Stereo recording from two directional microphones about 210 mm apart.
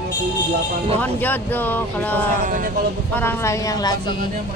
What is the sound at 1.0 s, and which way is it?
Speech, 10° left (ahead or behind).